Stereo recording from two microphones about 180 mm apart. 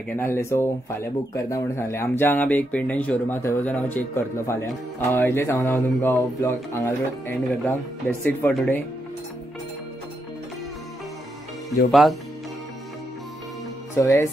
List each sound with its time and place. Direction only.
0.2 s speech: 15° left (ahead or behind)
11.9 s speech: centre (ahead or behind)
13.9 s speech: 15° left (ahead or behind)